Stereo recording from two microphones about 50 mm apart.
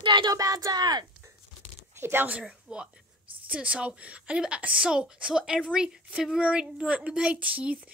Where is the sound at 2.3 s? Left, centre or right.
Right.